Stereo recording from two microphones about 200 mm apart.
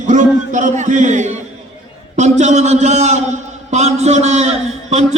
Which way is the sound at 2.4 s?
35° right (ahead or behind).